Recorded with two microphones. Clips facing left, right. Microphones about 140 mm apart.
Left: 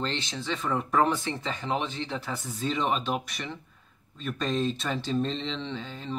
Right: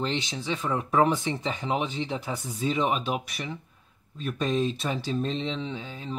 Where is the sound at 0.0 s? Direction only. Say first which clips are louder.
Right 2 dB; 15° right (ahead or behind).